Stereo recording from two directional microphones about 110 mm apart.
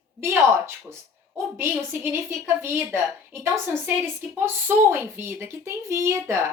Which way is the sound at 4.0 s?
20° right (ahead or behind).